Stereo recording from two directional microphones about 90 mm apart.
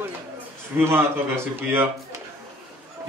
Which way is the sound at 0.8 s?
25° right (ahead or behind).